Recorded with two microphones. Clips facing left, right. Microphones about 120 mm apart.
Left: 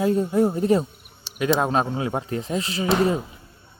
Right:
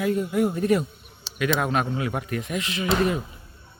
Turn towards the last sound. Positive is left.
turn(degrees=30)  # may be behind; listen again after turning